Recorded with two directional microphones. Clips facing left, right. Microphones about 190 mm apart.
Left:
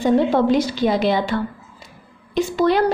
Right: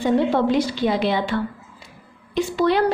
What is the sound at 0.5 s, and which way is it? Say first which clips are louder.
A woman's voice: left 2 dB; 40° left (ahead or behind).